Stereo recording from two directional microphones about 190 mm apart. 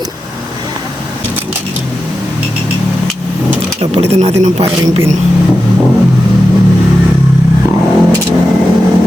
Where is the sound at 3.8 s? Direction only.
30° right (ahead or behind).